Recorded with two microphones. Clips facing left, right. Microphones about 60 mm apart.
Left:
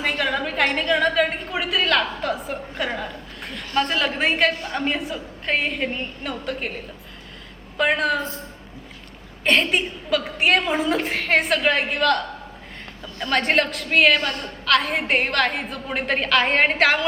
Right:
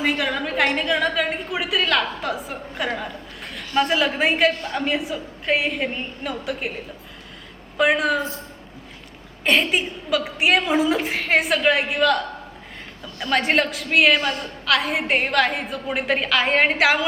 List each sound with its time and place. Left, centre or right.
0.0 s a woman's voice: centre
7.8 s a woman's voice: centre
9.4 s a woman's voice: centre